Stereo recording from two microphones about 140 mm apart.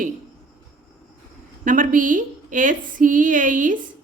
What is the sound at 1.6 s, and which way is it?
Speech, 70° right (ahead or behind).